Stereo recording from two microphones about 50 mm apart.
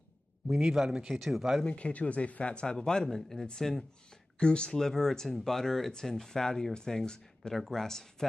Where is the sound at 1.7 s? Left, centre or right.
Left.